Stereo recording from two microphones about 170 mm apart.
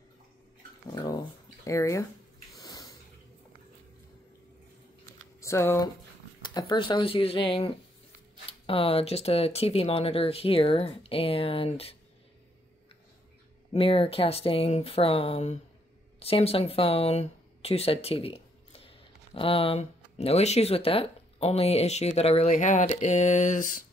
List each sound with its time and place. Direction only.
1.0 s a sound: 20° left (ahead or behind)
5.4 s speech: 15° left (ahead or behind)
6.4 s speech: 25° left (ahead or behind)
13.7 s speech: 35° left (ahead or behind)